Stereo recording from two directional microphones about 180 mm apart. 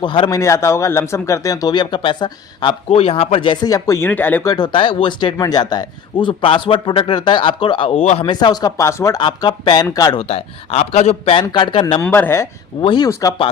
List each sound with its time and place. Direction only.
0.0 s speech: 25° left (ahead or behind); by 4.5 s 10° left (ahead or behind)
4.5 s speech: 25° left (ahead or behind)
10.2 s a man's voice: 35° left (ahead or behind)
12.0 s speech: 10° left (ahead or behind)
12.8 s speech: 25° left (ahead or behind)
13.1 s speech: 15° left (ahead or behind)